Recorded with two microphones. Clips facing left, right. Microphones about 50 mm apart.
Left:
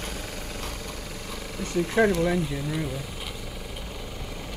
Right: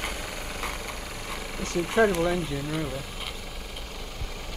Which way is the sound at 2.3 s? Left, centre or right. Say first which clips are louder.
Left 1 dB; centre.